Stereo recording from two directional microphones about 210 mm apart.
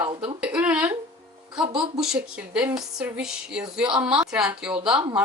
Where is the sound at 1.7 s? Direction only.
25° right (ahead or behind).